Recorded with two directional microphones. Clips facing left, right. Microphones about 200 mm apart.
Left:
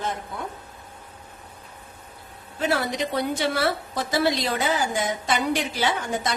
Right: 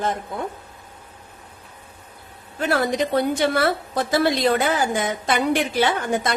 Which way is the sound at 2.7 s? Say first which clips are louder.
Right 5 dB; 55° right (ahead or behind).